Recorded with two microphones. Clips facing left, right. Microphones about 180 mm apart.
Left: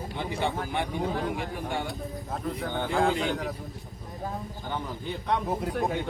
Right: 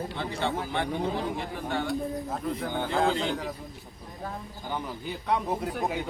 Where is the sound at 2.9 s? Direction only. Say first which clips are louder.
Left 1 dB; 5° left (ahead or behind).